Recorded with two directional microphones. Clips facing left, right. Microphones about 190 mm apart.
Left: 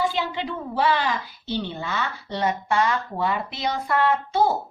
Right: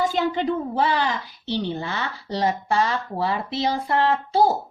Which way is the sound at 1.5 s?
35° right (ahead or behind).